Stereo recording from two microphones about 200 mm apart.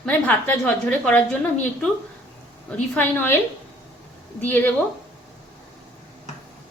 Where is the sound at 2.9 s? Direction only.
10° left (ahead or behind).